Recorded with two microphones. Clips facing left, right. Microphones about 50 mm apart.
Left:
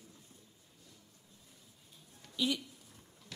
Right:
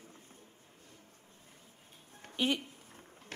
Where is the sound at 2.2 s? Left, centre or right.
Right.